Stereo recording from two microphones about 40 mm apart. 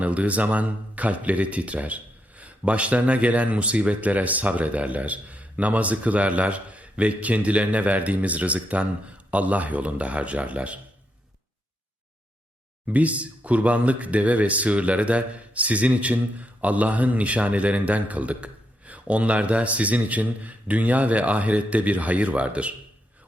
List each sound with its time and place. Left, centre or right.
0.0 s speech: right
12.8 s speech: right